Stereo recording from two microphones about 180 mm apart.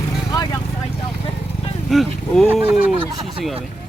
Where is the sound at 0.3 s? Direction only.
20° left (ahead or behind).